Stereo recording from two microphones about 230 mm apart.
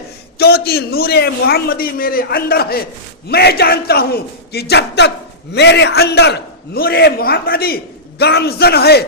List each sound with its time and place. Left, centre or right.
0.3 s a man's voice: left